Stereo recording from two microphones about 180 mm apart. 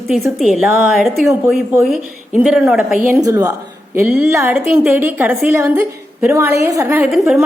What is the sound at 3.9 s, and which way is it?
Speech, 10° right (ahead or behind).